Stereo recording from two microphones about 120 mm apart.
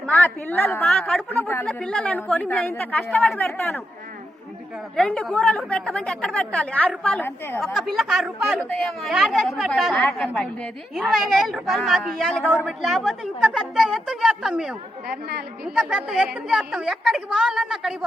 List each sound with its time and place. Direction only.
0.0 s a woman's voice: 15° left (ahead or behind)
0.9 s a woman's voice: 5° left (ahead or behind)
1.3 s a woman's voice: 15° left (ahead or behind)
4.9 s a woman's voice: 5° left (ahead or behind)
7.6 s a woman's voice: 5° left (ahead or behind)
12.6 s a woman's voice: centre (ahead or behind)